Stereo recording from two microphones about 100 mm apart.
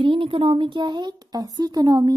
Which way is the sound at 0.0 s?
60° right (ahead or behind).